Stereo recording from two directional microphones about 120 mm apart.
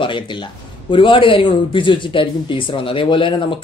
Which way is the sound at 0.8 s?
45° left (ahead or behind).